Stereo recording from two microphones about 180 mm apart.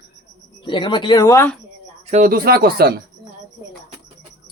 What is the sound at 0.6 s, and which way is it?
Speech, 25° left (ahead or behind).